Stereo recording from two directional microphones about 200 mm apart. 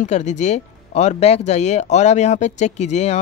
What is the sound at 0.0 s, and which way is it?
Speech, 35° left (ahead or behind).